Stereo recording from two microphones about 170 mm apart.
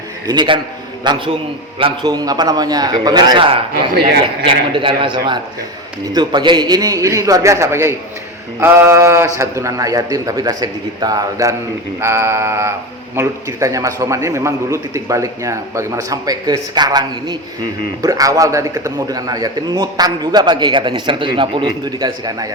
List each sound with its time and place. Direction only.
0.3 s a man's voice: 30° right (ahead or behind)
11.9 s mantra: 15° right (ahead or behind)
13.1 s a man's voice: 20° right (ahead or behind)